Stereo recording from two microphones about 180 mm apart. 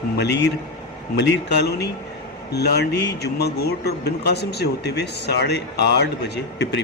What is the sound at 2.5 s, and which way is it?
Speech, 65° left (ahead or behind).